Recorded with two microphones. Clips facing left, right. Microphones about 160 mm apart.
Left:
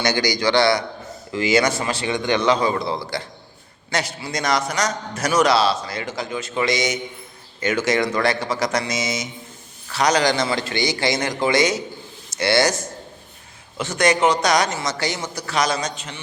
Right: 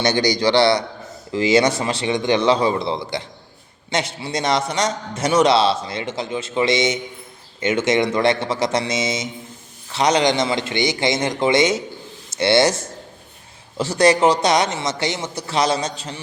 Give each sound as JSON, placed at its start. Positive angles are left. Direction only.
{"t": 0.0, "sound": "a man's voice", "side_deg": -30}